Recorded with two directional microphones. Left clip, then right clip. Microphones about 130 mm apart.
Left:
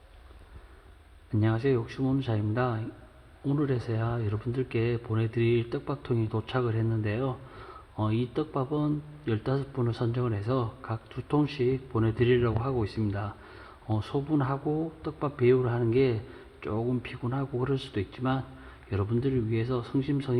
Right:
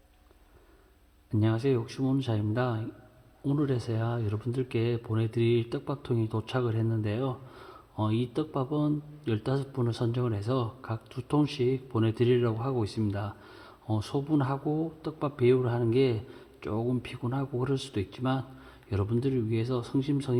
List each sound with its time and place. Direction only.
1.3 s speech: 20° right (ahead or behind)
12.0 s speech: 40° right (ahead or behind)
12.4 s speech: 10° right (ahead or behind)